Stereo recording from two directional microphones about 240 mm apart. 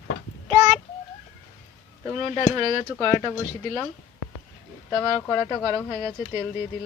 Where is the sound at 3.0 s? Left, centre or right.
Centre.